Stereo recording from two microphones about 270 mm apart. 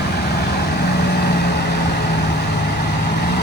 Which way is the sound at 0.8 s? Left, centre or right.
Left.